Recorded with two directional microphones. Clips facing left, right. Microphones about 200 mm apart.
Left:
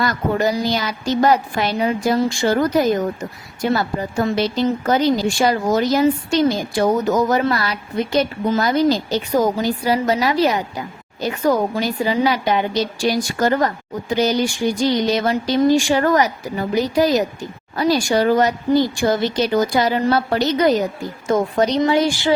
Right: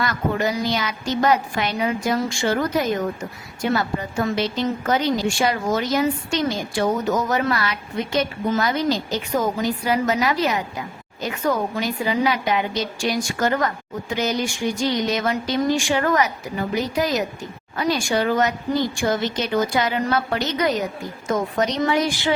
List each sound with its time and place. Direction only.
0.0 s a woman's voice: 35° left (ahead or behind)